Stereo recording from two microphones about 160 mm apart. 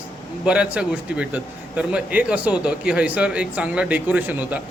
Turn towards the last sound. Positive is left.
turn(degrees=-10)  # may be behind; listen again after turning